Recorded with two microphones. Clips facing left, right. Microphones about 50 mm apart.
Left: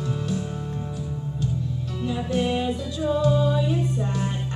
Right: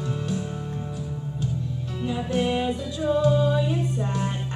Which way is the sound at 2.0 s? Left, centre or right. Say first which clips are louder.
Even; centre.